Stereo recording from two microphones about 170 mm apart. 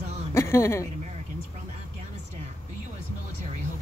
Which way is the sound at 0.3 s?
15° left (ahead or behind).